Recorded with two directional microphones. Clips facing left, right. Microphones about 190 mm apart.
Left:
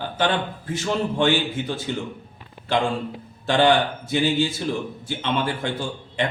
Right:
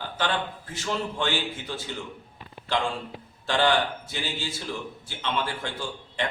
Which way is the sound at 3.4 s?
15° left (ahead or behind).